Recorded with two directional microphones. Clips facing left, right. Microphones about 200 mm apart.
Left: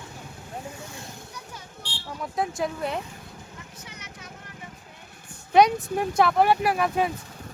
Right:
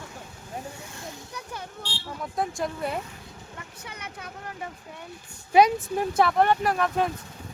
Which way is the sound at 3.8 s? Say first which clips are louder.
Right 4 dB; 55° right (ahead or behind).